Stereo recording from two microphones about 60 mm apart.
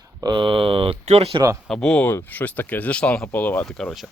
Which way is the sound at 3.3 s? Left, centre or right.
Left.